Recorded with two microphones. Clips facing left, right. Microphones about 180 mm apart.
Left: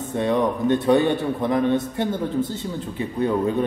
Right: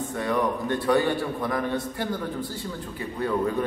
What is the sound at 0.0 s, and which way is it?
A man's voice, 20° left (ahead or behind).